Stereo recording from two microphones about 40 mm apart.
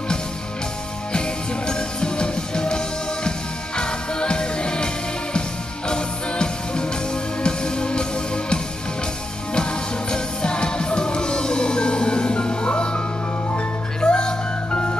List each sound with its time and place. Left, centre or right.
1.1 s music: left
14.0 s music: left